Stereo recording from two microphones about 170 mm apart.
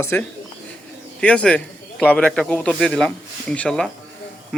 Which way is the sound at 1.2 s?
5° left (ahead or behind).